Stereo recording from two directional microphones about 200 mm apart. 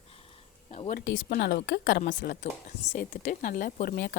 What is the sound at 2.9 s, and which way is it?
A woman's voice, 45° left (ahead or behind).